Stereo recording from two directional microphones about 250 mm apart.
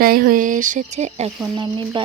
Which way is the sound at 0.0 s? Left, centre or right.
Right.